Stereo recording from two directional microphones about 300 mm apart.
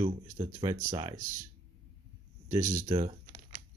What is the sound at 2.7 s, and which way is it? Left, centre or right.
Typing, centre.